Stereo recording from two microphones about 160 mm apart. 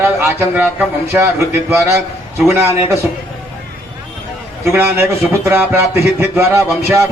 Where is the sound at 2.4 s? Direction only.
15° right (ahead or behind).